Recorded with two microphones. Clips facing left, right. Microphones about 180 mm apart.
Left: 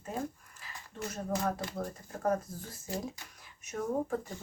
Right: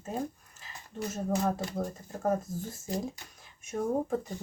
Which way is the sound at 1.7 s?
20° right (ahead or behind).